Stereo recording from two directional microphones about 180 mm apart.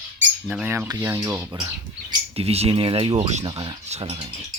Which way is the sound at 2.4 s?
35° right (ahead or behind).